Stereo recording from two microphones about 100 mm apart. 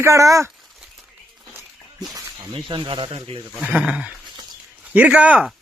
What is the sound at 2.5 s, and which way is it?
Speech, 60° right (ahead or behind).